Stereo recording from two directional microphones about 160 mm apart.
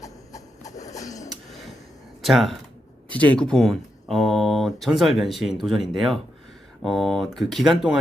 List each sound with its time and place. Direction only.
0.0 s a sound: 20° left (ahead or behind)
0.9 s printer: 20° left (ahead or behind)
2.2 s speech: centre (ahead or behind)